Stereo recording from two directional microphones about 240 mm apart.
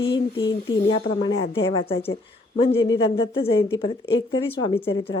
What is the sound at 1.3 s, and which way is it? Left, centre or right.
Speech, left.